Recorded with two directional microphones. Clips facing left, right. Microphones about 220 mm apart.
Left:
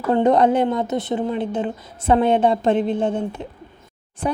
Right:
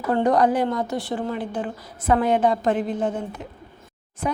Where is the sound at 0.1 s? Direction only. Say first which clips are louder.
Left 3 dB; 25° left (ahead or behind).